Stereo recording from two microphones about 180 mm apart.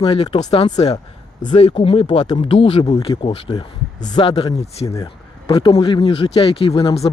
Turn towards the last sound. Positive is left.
turn(degrees=30)  # may be behind; listen again after turning